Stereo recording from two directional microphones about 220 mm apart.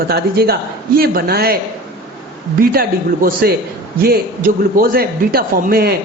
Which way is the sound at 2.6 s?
40° right (ahead or behind).